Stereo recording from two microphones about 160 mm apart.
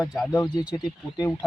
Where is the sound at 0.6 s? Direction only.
5° right (ahead or behind).